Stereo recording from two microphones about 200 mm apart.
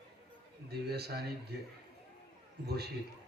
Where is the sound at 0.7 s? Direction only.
55° right (ahead or behind).